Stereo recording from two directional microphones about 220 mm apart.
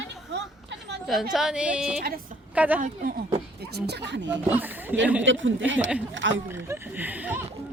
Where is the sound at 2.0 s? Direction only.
40° right (ahead or behind).